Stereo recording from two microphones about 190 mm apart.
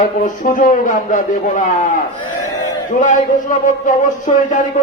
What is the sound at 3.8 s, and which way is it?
Speech, 40° left (ahead or behind).